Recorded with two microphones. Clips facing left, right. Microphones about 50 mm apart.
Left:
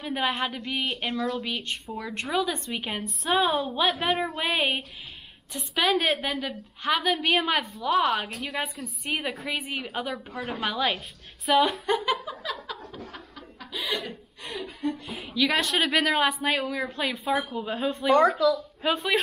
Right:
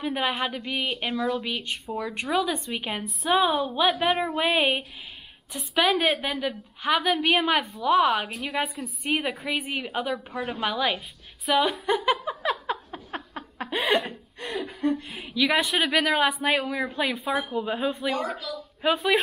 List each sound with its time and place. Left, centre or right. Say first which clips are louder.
0.0 s a woman's voice: right 1 dB; centre
11.9 s a sound: right 2 dB; centre
12.4 s chuckle: right 10 dB; right
14.8 s chuckle: right 4 dB; right
15.2 s a woman's voice: right 1 dB; centre